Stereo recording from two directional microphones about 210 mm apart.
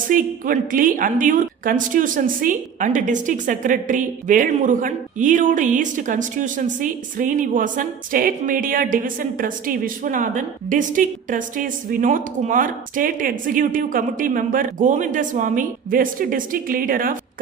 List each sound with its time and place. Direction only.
0.1 s a woman's voice: 40° right (ahead or behind)